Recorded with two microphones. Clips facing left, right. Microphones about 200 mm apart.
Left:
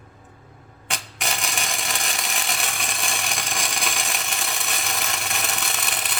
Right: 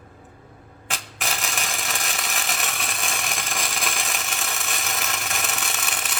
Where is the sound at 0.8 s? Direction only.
Centre (ahead or behind).